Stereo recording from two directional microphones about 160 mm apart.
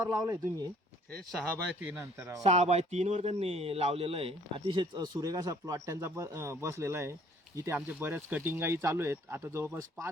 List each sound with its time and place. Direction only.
0.0 s speech: 20° right (ahead or behind)
1.9 s speech: 15° right (ahead or behind)
2.4 s speech: 45° right (ahead or behind); by 10.1 s 15° right (ahead or behind)